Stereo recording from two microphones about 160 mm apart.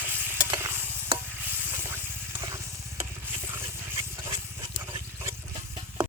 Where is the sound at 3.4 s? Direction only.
15° right (ahead or behind).